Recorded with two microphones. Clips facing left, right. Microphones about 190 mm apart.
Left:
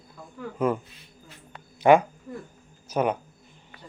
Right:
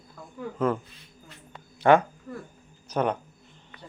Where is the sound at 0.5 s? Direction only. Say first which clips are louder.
Left 1 dB; 10° left (ahead or behind).